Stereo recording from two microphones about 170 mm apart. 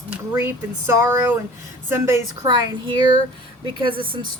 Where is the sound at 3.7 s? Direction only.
30° right (ahead or behind).